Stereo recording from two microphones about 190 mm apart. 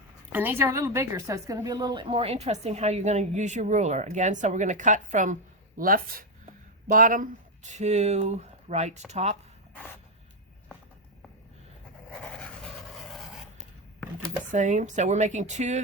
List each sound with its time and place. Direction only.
0.3 s a woman's voice: 10° right (ahead or behind); by 9.4 s 35° right (ahead or behind)
14.5 s a woman's voice: 40° right (ahead or behind)